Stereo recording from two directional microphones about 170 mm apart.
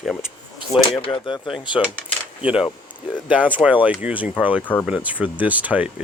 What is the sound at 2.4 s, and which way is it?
Speech, 5° right (ahead or behind).